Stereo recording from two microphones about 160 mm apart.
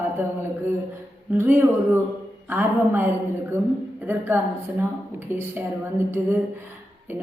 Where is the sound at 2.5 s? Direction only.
10° right (ahead or behind).